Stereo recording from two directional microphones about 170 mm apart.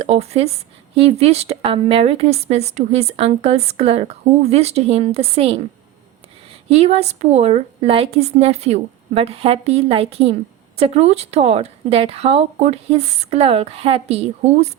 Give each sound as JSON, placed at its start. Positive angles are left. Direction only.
{"t": 0.0, "sound": "speech", "side_deg": -40}
{"t": 6.7, "sound": "speech", "side_deg": -35}